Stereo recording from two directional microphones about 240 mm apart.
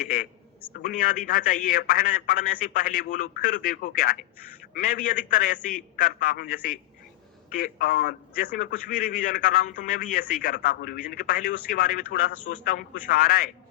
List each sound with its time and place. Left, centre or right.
0.0 s a man's voice: left